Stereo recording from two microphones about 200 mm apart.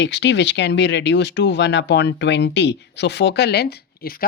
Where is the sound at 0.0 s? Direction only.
60° left (ahead or behind).